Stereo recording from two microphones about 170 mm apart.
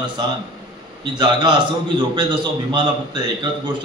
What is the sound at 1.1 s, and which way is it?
A man's voice, 25° right (ahead or behind).